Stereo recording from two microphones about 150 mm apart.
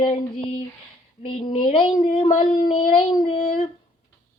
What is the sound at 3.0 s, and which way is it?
Female singing, 35° left (ahead or behind).